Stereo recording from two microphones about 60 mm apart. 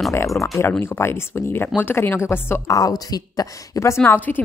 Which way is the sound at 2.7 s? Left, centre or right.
Left.